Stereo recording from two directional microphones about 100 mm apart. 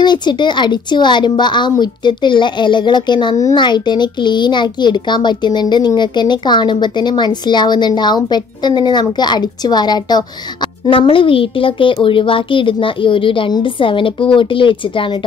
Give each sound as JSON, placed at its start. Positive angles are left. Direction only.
{"t": 0.0, "sound": "a child's voice", "side_deg": 45}
{"t": 10.9, "sound": "speech", "side_deg": 60}